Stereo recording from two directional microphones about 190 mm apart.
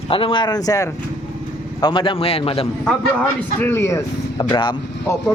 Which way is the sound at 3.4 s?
10° left (ahead or behind).